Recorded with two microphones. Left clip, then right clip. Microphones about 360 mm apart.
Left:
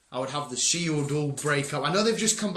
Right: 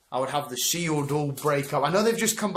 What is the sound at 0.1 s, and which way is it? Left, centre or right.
Speech, centre.